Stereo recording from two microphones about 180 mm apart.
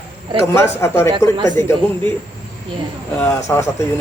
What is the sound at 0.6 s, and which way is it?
Speech, 15° left (ahead or behind).